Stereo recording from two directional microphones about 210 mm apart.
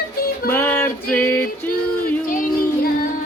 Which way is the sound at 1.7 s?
40° left (ahead or behind).